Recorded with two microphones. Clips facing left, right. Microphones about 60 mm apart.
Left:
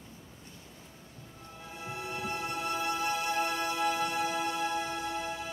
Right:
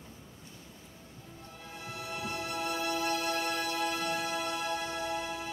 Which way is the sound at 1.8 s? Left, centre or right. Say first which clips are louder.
Left 2 dB; left.